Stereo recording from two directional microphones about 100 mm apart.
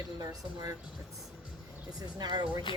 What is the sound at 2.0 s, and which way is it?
Speech, 45° right (ahead or behind).